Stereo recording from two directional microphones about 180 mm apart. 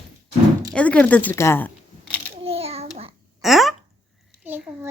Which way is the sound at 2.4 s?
35° right (ahead or behind).